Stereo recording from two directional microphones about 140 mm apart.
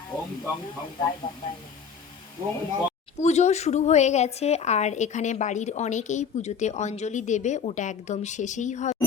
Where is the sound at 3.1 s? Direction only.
55° left (ahead or behind).